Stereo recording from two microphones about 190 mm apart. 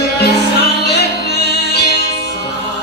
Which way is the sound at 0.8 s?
60° left (ahead or behind).